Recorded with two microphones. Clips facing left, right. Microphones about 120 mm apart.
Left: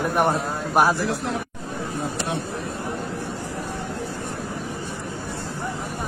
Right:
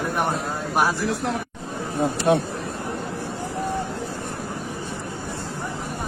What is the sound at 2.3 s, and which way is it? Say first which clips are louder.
Speech: right 12 dB; 60° right (ahead or behind).